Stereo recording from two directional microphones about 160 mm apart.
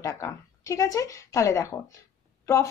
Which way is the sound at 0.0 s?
20° left (ahead or behind).